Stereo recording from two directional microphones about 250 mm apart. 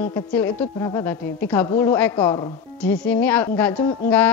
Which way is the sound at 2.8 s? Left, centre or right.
Centre.